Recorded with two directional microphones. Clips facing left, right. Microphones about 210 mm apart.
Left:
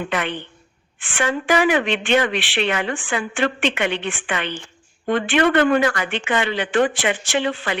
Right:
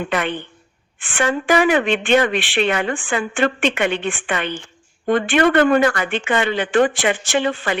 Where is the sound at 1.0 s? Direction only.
50° right (ahead or behind).